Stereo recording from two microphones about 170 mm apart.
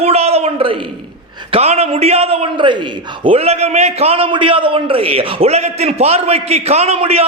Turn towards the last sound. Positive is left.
turn(degrees=-35)  # may be behind; listen again after turning